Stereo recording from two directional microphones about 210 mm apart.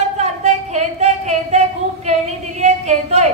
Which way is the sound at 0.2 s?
35° right (ahead or behind).